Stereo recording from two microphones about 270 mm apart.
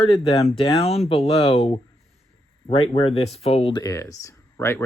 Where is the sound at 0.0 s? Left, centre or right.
Left.